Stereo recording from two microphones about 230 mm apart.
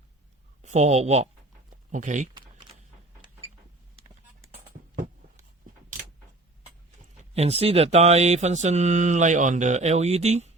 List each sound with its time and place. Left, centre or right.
0.6 s speech: right
7.3 s speech: right